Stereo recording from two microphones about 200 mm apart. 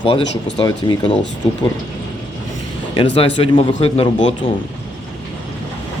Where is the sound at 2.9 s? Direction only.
25° left (ahead or behind).